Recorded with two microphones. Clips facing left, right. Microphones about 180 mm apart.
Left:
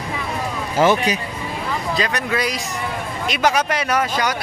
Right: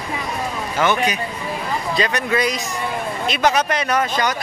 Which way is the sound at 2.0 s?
Centre (ahead or behind).